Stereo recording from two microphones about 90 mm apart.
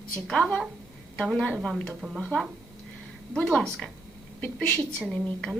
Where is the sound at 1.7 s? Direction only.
5° right (ahead or behind).